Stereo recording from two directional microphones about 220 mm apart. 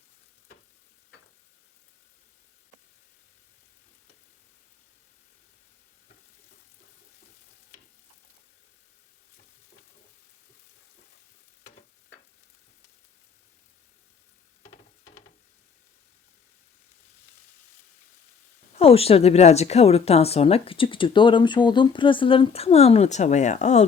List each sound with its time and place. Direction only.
18.8 s a woman's voice: 25° left (ahead or behind)